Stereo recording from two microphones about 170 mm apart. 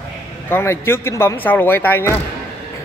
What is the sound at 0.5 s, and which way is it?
Speech, 15° left (ahead or behind).